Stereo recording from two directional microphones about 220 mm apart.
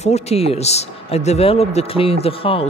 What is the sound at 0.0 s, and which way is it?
Speech, 30° left (ahead or behind).